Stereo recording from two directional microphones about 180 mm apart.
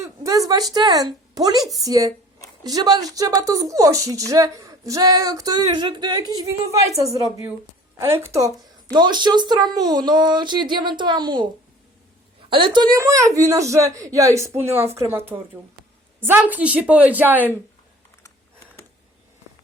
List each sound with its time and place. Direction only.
0.0 s speech: 15° right (ahead or behind)
12.5 s speech: 30° right (ahead or behind); by 17.4 s 10° right (ahead or behind)